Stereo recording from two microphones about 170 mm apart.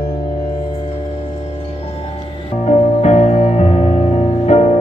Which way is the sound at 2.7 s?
40° left (ahead or behind).